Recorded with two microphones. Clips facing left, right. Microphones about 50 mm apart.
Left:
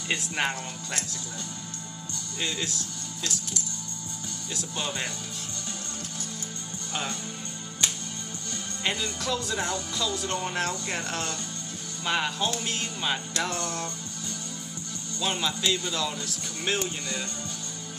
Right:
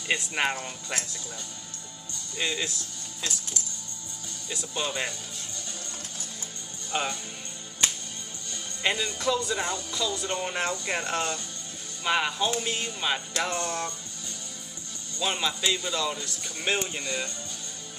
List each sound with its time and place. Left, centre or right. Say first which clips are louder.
0.4 s speech: right 1 dB; centre
2.3 s speech: right 2 dB; centre
4.5 s speech: right 2 dB; centre
6.9 s speech: right 3 dB; centre
8.8 s speech: right 3 dB; centre
15.1 s speech: right 1 dB; centre
17.0 s speech: right 2 dB; right